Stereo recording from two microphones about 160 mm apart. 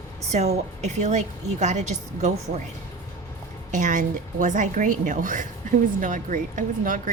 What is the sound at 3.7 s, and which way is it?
A woman's voice, 50° right (ahead or behind).